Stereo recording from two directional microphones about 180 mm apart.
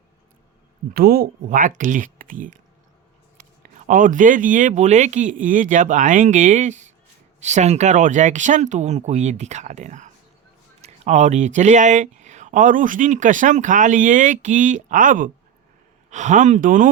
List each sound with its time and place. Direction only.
0.9 s speech: 55° right (ahead or behind)
3.4 s a sound: 40° right (ahead or behind)
3.8 s speech: 45° right (ahead or behind)